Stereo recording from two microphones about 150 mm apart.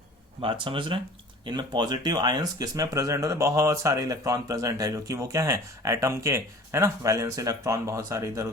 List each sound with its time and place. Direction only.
0.4 s speech: 35° right (ahead or behind)